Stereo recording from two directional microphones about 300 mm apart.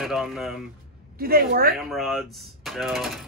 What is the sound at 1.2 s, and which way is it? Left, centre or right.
Speech, right.